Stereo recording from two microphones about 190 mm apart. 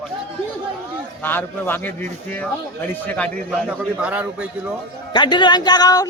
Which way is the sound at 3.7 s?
5° right (ahead or behind).